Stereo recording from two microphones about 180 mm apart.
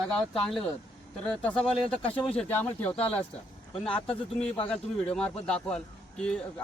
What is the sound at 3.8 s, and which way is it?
Speech, 30° left (ahead or behind).